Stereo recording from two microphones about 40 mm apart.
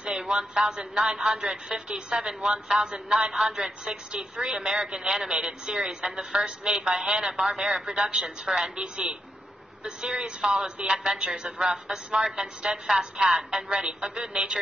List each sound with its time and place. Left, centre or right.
0.2 s a man's voice: centre
6.7 s a man's voice: centre
8.7 s a woman's voice: right; by 13.7 s centre
13.7 s a woman's voice: right